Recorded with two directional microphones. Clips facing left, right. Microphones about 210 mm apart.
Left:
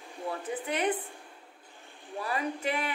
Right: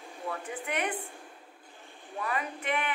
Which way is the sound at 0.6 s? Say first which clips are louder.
Left 3 dB; 35° left (ahead or behind).